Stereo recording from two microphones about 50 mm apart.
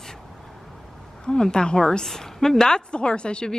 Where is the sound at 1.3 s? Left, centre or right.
Centre.